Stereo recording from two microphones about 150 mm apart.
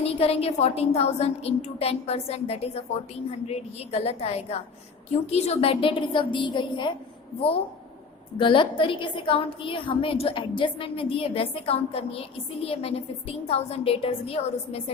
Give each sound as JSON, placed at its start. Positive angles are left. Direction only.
{"t": 0.0, "sound": "a woman's voice", "side_deg": 40}
{"t": 8.4, "sound": "a woman's voice", "side_deg": 35}